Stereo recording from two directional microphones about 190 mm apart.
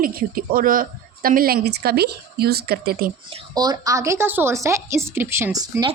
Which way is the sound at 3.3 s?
20° right (ahead or behind).